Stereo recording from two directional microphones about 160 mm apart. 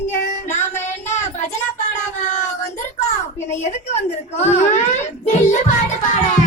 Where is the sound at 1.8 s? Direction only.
50° left (ahead or behind).